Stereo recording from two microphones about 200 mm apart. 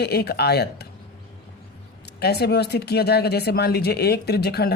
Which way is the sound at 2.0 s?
55° left (ahead or behind).